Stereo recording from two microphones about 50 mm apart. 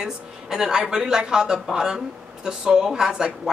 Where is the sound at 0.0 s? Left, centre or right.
Centre.